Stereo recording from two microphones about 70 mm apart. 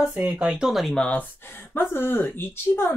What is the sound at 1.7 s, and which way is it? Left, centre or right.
Speech, left.